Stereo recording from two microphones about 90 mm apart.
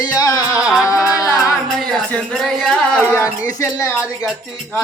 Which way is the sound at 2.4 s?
5° left (ahead or behind).